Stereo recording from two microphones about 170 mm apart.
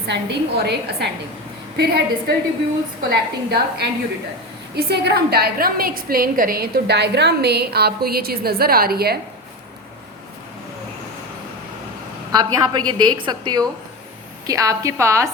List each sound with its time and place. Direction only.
0.1 s a woman's voice: 80° right; by 9.1 s 65° right (ahead or behind)
12.3 s a woman's voice: 25° right (ahead or behind)